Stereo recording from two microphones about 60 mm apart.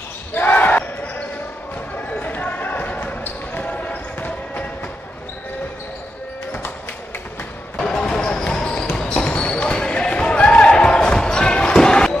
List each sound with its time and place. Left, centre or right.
0.3 s basketball bounce: left
7.7 s basketball bounce: centre